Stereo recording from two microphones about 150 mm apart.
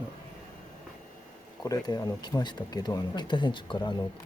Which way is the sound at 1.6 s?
25° left (ahead or behind).